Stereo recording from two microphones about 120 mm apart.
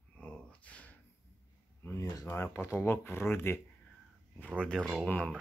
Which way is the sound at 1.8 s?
25° left (ahead or behind).